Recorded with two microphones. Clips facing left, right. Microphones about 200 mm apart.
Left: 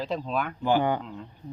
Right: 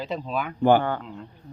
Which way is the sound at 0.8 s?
15° left (ahead or behind).